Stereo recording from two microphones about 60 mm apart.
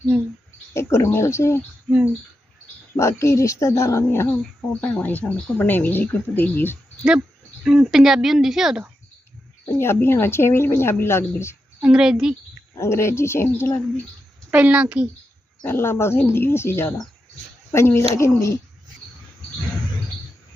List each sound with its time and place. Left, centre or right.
0.7 s a woman's voice: left
2.9 s a woman's voice: left
4.8 s speech: left
7.6 s speech: centre
9.7 s a woman's voice: left
11.8 s speech: centre
12.7 s a woman's voice: left
14.5 s a woman's voice: right
15.6 s a woman's voice: left
18.3 s dog: left